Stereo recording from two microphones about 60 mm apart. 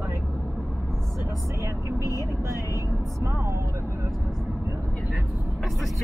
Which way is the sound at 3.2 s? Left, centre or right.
Right.